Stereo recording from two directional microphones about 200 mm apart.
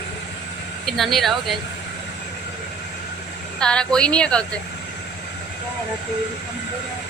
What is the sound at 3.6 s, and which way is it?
Speech, 5° left (ahead or behind).